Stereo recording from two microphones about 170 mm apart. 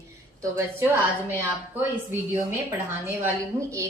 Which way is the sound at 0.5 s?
15° right (ahead or behind).